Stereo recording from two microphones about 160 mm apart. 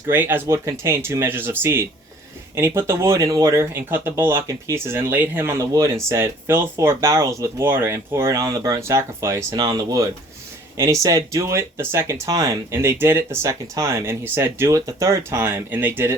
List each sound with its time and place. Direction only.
0.1 s speech: 15° right (ahead or behind)